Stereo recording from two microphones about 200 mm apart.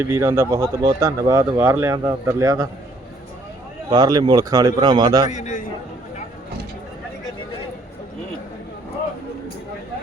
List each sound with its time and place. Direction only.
0.0 s speech: 10° right (ahead or behind)
3.8 s a man's voice: 20° right (ahead or behind)
5.3 s a man's voice: 40° left (ahead or behind)